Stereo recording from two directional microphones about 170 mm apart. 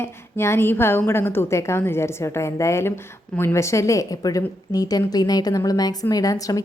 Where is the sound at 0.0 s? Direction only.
15° left (ahead or behind).